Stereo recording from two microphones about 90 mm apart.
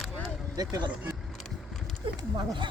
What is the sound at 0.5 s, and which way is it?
Speech, 45° right (ahead or behind).